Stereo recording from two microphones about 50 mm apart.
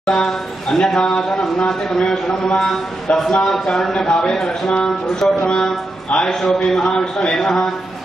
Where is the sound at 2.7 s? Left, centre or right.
Centre.